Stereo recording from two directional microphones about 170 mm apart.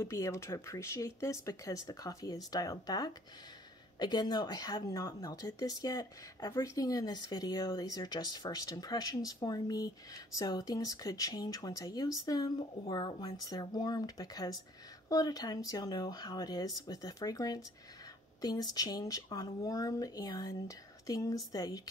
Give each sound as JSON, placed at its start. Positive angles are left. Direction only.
{"t": 0.0, "sound": "speech", "side_deg": 15}